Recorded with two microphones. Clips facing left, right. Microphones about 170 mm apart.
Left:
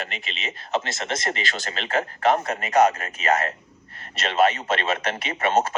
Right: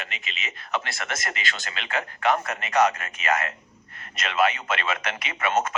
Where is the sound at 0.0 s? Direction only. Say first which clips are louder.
Left 4 dB; 35° left (ahead or behind).